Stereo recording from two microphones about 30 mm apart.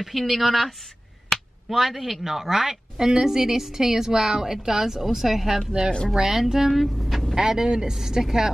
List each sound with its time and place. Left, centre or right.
0.2 s speech: centre
1.3 s a sound: centre
2.2 s a woman's voice: centre
7.3 s speech: right